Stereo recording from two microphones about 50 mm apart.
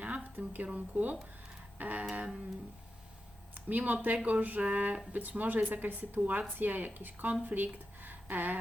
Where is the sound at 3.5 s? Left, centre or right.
Right.